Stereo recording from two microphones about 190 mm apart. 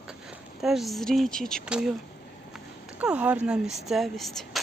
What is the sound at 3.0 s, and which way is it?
Speech, 5° right (ahead or behind).